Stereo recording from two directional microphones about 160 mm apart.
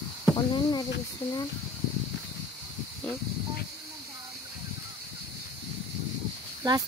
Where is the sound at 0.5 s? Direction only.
30° left (ahead or behind).